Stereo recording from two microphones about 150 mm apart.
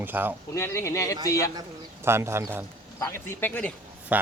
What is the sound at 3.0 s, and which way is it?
Speech, 15° left (ahead or behind).